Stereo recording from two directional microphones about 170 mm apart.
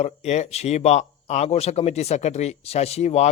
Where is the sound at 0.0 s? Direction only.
40° left (ahead or behind).